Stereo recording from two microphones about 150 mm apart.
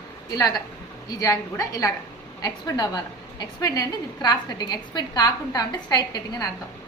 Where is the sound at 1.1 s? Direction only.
20° left (ahead or behind).